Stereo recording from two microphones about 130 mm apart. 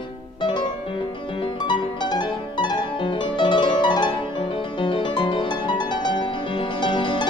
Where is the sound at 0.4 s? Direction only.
35° left (ahead or behind).